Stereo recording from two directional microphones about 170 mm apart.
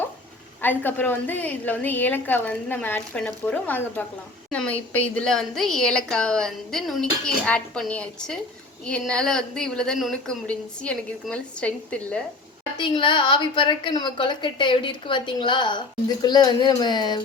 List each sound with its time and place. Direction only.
0.6 s a woman's voice: 10° left (ahead or behind)
12.7 s a woman's voice: 30° left (ahead or behind)